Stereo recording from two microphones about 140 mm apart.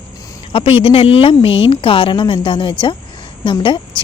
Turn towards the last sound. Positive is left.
turn(degrees=35)  # may be behind; listen again after turning